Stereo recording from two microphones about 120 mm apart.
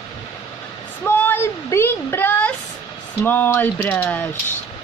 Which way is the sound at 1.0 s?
15° left (ahead or behind).